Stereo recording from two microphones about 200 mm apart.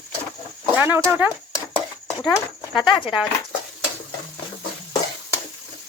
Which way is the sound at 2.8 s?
25° left (ahead or behind).